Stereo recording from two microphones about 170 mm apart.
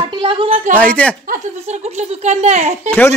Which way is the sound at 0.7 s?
10° left (ahead or behind).